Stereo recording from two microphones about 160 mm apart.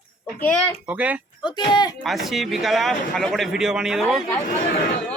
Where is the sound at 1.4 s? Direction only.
30° left (ahead or behind).